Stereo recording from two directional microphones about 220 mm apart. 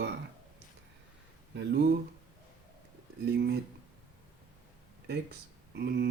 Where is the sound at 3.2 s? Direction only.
45° right (ahead or behind).